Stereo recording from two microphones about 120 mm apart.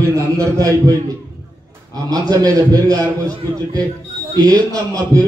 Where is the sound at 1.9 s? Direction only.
35° right (ahead or behind).